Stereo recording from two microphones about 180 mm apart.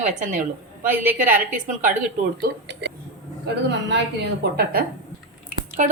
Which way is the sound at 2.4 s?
70° right (ahead or behind).